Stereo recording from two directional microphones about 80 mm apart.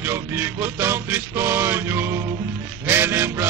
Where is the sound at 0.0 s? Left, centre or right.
Right.